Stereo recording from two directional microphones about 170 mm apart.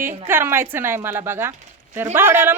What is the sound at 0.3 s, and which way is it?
Speech, 15° right (ahead or behind).